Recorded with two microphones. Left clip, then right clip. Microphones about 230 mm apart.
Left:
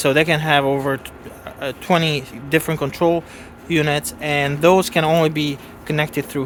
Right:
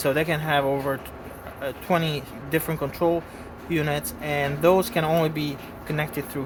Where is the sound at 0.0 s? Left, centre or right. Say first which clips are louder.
Left 7 dB; left.